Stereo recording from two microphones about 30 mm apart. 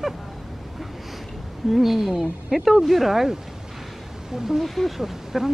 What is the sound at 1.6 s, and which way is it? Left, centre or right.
Speech, centre.